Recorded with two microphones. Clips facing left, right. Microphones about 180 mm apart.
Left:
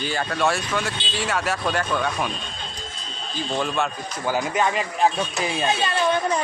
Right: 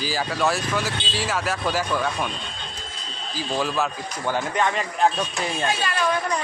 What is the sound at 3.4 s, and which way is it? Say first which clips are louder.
Speech: even; 5° right (ahead or behind).